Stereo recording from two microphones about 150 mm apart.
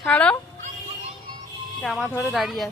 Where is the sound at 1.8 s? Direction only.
Centre (ahead or behind).